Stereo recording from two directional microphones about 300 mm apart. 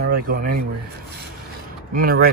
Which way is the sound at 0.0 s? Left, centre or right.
Right.